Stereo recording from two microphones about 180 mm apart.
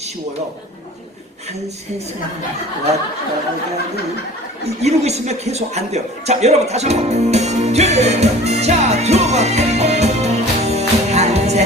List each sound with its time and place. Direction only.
4.6 s a man's voice: 35° right (ahead or behind)